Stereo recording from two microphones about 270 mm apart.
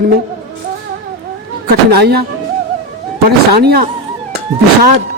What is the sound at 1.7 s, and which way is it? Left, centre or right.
Speech, right.